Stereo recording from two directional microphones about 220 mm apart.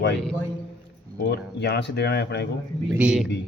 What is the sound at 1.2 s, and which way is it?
A man's voice, 50° left (ahead or behind).